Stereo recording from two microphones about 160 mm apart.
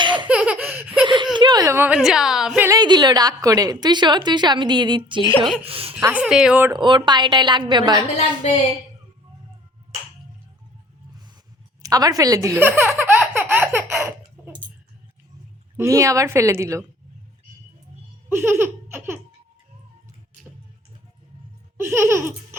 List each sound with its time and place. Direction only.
0.0 s laughter: 30° right (ahead or behind)
0.3 s laughter: 5° right (ahead or behind)
1.0 s giggle: 30° right (ahead or behind); by 2.0 s 15° right (ahead or behind)
2.0 s a woman's voice: 5° right (ahead or behind)
2.6 s a woman's voice: 25° right (ahead or behind)
6.0 s a woman's voice: 15° right (ahead or behind)
6.2 s speech: 5° right (ahead or behind)
6.7 s a woman's voice: 30° right (ahead or behind)
8.4 s a woman's voice: 45° left (ahead or behind)
11.8 s a woman's voice: 25° right (ahead or behind)
13.0 s baby laughter: 15° right (ahead or behind)
15.8 s a woman's voice: 20° right (ahead or behind)
18.3 s laughter: 15° right (ahead or behind)
21.8 s speech: 15° right (ahead or behind)